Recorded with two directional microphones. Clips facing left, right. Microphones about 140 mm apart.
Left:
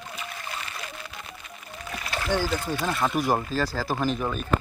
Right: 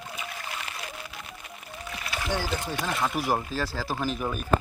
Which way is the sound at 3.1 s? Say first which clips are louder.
Left 3 dB; 5° right (ahead or behind).